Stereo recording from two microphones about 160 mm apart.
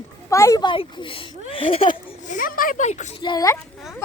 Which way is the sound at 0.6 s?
30° left (ahead or behind).